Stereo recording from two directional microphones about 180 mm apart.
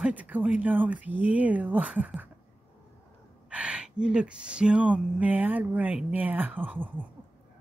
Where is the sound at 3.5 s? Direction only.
5° right (ahead or behind).